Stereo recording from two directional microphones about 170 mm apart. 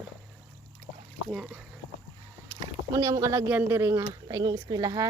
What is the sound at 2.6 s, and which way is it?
Speech, 20° right (ahead or behind).